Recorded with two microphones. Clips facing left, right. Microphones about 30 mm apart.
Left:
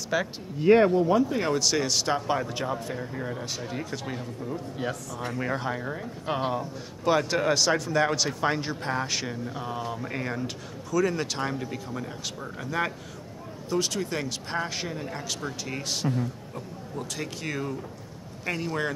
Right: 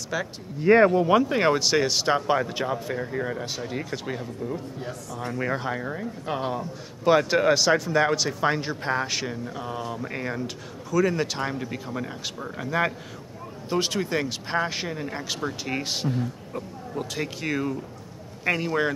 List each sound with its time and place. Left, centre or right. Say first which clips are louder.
0.1 s speech: left 2 dB; centre
1.1 s speech: right 3 dB; right
1.5 s speech: right 3 dB; right; by 6.0 s centre
6.2 s speech: left 1 dB; centre
7.1 s speech: right 4 dB; centre
13.7 s speech: right 2 dB; right
14.0 s speech: right 4 dB; centre